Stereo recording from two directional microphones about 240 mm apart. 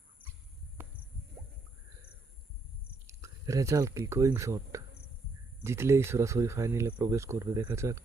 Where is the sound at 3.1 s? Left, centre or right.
Centre.